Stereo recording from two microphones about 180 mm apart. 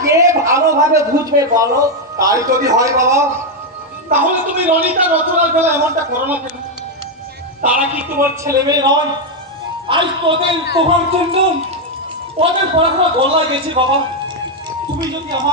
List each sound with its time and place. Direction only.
0.0 s a man's voice: 15° right (ahead or behind)
7.7 s a man's voice: 10° right (ahead or behind); by 9.0 s 25° right (ahead or behind)
10.8 s a man's voice: 30° right (ahead or behind)
12.4 s a man's voice: 30° right (ahead or behind)
15.0 s a man's voice: 25° right (ahead or behind)